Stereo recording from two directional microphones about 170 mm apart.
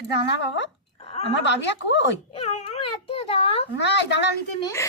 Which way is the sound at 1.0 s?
35° left (ahead or behind).